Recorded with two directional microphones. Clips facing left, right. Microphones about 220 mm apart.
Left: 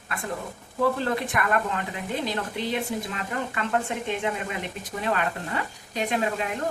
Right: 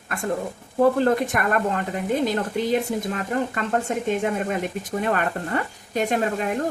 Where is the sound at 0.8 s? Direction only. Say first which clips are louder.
Right 6 dB; 45° right (ahead or behind).